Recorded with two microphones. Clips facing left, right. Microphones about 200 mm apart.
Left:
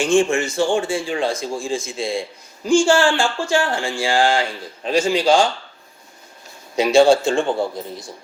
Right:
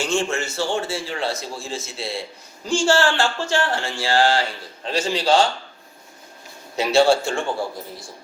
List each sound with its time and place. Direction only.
0.0 s speech: 15° left (ahead or behind)
6.7 s speech: 15° left (ahead or behind)